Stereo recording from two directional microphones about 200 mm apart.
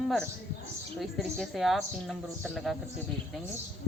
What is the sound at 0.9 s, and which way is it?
Speech, centre (ahead or behind).